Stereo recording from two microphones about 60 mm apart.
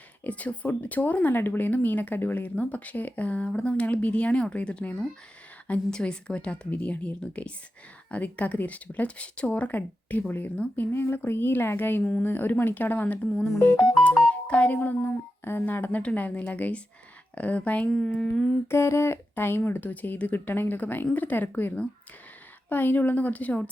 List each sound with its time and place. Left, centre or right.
0.3 s speech: left
10.9 s speech: left
18.7 s speech: left
22.7 s speech: left